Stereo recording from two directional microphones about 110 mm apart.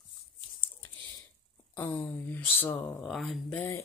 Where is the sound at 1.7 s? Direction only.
15° left (ahead or behind).